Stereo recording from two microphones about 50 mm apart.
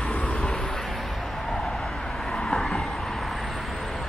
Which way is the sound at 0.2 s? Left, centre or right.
Left.